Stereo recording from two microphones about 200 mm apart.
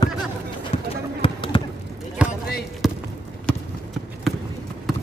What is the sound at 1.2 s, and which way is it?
Basketball bounce, 25° left (ahead or behind).